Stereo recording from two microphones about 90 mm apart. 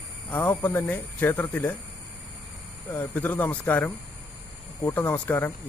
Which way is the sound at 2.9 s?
20° left (ahead or behind).